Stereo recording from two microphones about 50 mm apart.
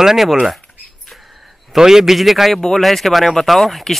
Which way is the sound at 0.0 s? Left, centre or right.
Centre.